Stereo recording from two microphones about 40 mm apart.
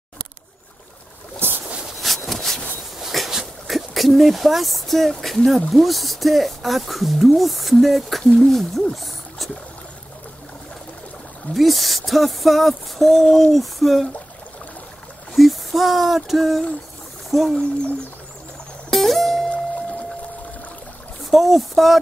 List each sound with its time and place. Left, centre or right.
1.4 s a sound: right
2.0 s a sound: centre
3.0 s a sound: centre
3.6 s speech: centre
8.9 s music: centre
11.5 s speech: centre
15.3 s speech: centre
18.9 s music: centre
21.3 s speech: centre